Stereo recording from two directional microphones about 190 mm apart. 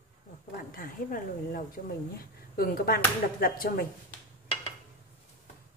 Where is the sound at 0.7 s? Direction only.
45° left (ahead or behind).